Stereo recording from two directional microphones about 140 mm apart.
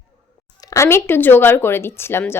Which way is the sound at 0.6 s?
20° left (ahead or behind).